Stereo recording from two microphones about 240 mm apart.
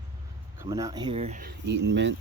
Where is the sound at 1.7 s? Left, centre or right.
Right.